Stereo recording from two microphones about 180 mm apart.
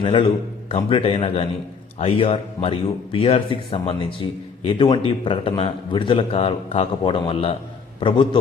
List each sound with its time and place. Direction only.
0.0 s a man's voice: 30° left (ahead or behind)